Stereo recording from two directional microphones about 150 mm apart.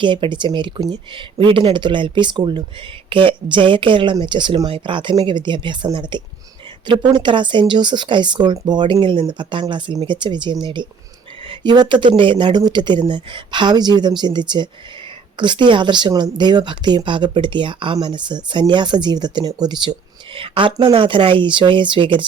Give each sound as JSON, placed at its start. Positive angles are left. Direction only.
{"t": 0.0, "sound": "speech", "side_deg": -30}